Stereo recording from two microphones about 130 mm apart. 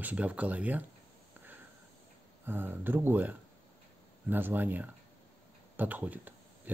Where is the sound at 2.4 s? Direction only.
15° right (ahead or behind).